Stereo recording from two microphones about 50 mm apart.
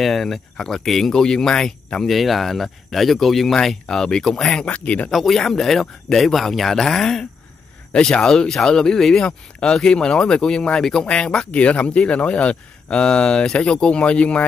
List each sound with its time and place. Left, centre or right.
0.0 s speech: centre
2.0 s speech: centre
3.8 s speech: centre
4.6 s speech: left
5.1 s speech: centre; by 14.4 s left